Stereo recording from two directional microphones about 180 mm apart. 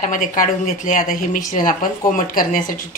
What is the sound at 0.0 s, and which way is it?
Speech, 45° left (ahead or behind).